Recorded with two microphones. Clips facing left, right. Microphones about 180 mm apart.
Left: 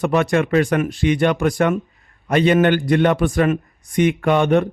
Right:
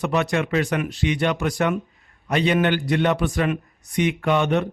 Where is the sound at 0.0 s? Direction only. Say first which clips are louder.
Left 5 dB; 50° left (ahead or behind).